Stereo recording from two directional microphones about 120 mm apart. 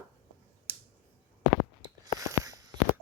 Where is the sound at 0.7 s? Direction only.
15° right (ahead or behind).